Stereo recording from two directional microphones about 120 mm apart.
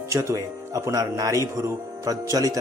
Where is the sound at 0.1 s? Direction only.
25° right (ahead or behind).